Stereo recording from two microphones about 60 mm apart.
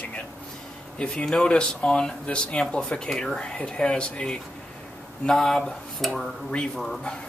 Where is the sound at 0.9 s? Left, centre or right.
Centre.